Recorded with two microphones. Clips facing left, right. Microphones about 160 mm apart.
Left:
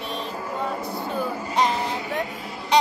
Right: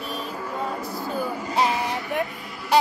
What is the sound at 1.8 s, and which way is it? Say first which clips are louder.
Vehicle: even; 20° left (ahead or behind).